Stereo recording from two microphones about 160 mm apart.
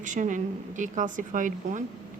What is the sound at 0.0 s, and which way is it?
A woman's voice, 50° right (ahead or behind).